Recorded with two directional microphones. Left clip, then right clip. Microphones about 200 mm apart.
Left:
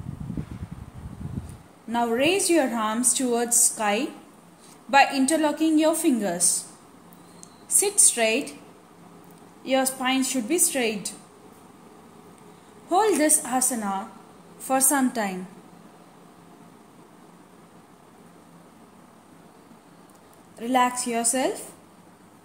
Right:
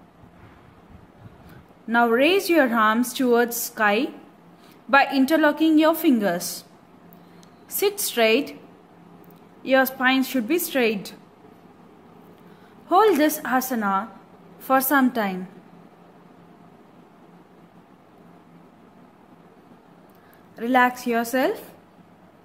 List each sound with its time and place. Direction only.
1.9 s a woman's voice: 30° right (ahead or behind)
7.7 s a woman's voice: 25° right (ahead or behind)
9.7 s a woman's voice: 25° right (ahead or behind)
12.9 s a woman's voice: 25° right (ahead or behind)
20.5 s a woman's voice: 25° right (ahead or behind)